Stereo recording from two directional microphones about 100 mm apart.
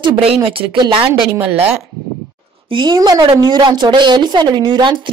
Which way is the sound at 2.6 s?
50° right (ahead or behind).